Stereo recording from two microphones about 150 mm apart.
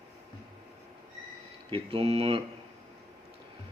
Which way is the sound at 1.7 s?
40° right (ahead or behind).